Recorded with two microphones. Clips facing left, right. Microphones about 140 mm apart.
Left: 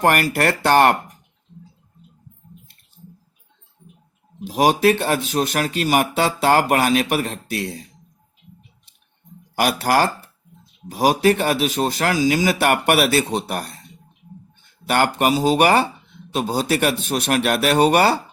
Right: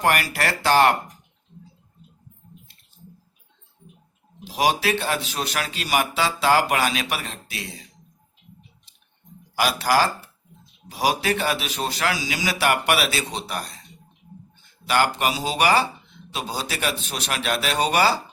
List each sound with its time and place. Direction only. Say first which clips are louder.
0.0 s speech: left 5 dB; 50° left (ahead or behind)
4.4 s speech: left 6 dB; 45° left (ahead or behind)
9.6 s speech: left 3 dB; 50° left (ahead or behind)
14.8 s speech: left 4 dB; 50° left (ahead or behind)